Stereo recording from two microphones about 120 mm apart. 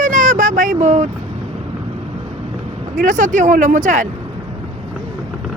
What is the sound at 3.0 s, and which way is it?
Speech, 90° right.